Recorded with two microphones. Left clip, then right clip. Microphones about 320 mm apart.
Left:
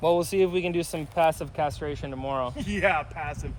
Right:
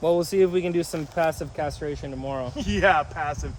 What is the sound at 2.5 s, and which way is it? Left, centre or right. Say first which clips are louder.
Speech: right 7 dB; centre.